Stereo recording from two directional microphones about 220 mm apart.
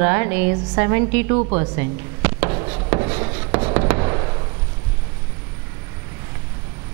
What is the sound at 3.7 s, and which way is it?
Fireworks, 15° right (ahead or behind).